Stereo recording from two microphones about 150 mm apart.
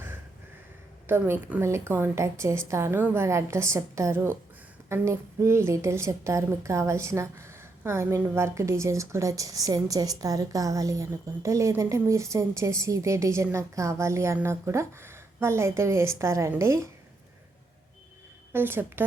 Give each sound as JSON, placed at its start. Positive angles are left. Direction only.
{"t": 1.0, "sound": "a woman's voice", "side_deg": -15}
{"t": 18.5, "sound": "a woman's voice", "side_deg": -15}